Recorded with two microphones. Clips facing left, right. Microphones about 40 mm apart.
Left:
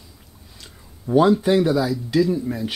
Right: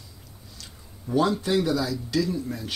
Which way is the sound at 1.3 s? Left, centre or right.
Centre.